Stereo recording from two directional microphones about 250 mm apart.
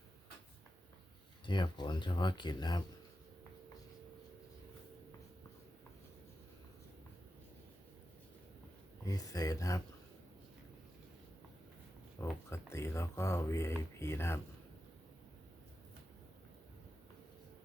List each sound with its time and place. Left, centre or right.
1.5 s speech: centre
9.0 s speech: centre
12.2 s speech: centre